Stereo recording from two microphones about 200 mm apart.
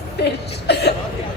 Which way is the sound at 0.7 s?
55° left (ahead or behind).